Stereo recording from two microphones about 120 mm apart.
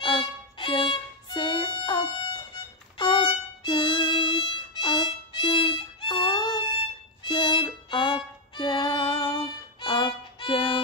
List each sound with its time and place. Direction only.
0.0 s violin: 40° left (ahead or behind)
7.2 s music: 40° left (ahead or behind)